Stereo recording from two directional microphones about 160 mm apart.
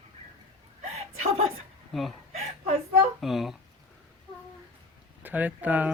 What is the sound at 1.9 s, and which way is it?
Speech, centre (ahead or behind).